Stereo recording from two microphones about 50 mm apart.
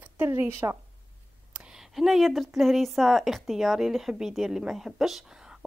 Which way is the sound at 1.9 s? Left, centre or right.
Centre.